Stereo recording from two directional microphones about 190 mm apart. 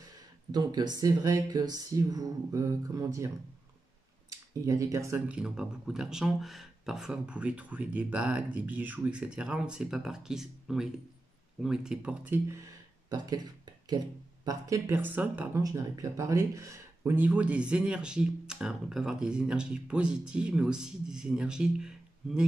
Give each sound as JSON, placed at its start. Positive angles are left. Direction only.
{"t": 0.5, "sound": "speech", "side_deg": -20}
{"t": 4.3, "sound": "speech", "side_deg": -15}
{"t": 13.1, "sound": "speech", "side_deg": -20}